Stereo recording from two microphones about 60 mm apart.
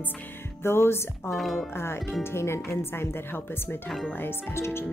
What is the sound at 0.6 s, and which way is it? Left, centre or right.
Speech, left.